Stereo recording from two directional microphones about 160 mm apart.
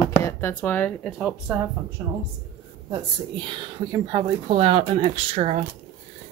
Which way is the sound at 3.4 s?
30° right (ahead or behind).